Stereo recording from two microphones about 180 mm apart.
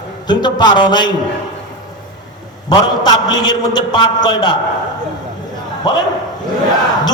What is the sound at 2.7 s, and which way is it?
A man's voice, 25° left (ahead or behind).